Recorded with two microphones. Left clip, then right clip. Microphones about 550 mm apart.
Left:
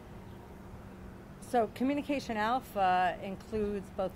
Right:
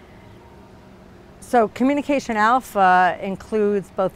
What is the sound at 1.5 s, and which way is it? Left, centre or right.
Speech, right.